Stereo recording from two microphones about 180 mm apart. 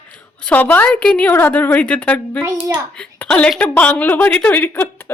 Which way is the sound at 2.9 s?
5° left (ahead or behind).